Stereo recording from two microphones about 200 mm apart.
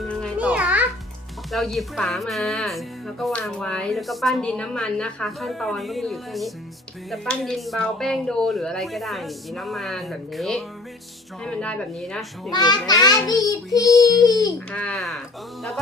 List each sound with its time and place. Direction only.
0.0 s music: 5° left (ahead or behind)
0.3 s music: 5° right (ahead or behind)
1.5 s speech: centre (ahead or behind)
12.5 s a child's voice: 20° left (ahead or behind)
13.7 s child singing: 15° left (ahead or behind)
14.7 s speech: 5° left (ahead or behind)